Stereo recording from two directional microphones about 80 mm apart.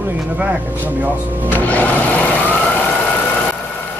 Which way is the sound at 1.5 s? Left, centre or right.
Left.